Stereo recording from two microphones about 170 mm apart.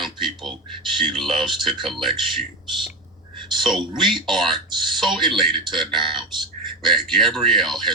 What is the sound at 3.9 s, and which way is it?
Speech, centre (ahead or behind).